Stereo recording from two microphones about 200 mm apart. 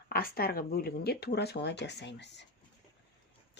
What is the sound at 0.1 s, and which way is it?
Speech, 50° left (ahead or behind).